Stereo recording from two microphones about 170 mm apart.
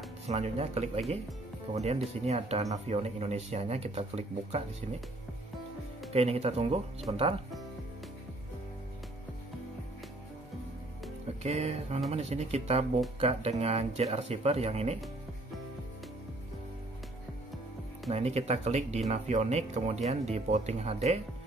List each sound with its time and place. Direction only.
0.3 s speech: 40° right (ahead or behind)
6.1 s speech: 35° right (ahead or behind)
11.4 s speech: 40° right (ahead or behind)
18.1 s speech: 40° right (ahead or behind)